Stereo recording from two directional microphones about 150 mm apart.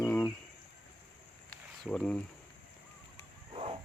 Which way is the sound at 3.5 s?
35° right (ahead or behind).